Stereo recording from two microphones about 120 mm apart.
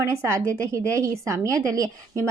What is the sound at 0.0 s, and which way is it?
Speech, 20° right (ahead or behind).